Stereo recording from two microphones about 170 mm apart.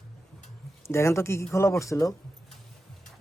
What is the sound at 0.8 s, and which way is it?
Speech, 15° left (ahead or behind).